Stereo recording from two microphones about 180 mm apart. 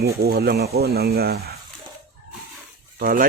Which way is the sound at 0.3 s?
60° right (ahead or behind).